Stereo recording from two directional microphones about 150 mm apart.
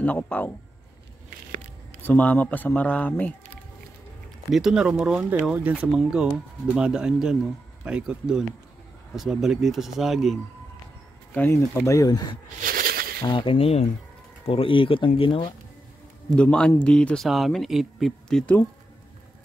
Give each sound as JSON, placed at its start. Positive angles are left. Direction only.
{"t": 0.0, "sound": "speech", "side_deg": 10}
{"t": 2.0, "sound": "speech", "side_deg": 10}
{"t": 4.5, "sound": "speech", "side_deg": -5}
{"t": 11.3, "sound": "speech", "side_deg": 15}
{"t": 12.6, "sound": "a sound", "side_deg": -80}
{"t": 13.2, "sound": "speech", "side_deg": 30}
{"t": 16.3, "sound": "speech", "side_deg": 5}